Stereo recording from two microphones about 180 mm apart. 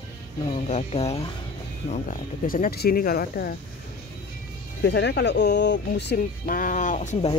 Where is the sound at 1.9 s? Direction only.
45° left (ahead or behind).